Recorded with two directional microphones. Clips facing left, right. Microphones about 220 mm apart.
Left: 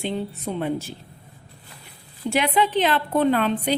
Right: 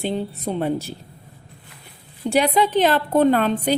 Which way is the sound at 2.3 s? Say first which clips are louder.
Right 3 dB; 35° right (ahead or behind).